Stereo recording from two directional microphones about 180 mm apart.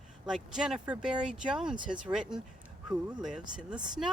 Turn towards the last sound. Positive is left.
turn(degrees=-5)  # may be behind; listen again after turning